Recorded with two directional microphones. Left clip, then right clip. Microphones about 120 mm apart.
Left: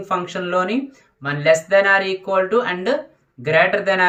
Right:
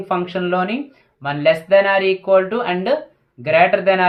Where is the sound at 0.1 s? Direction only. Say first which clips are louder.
Right 1 dB; 50° right (ahead or behind).